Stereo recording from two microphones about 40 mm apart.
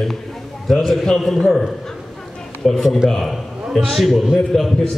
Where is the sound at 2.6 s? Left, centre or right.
Centre.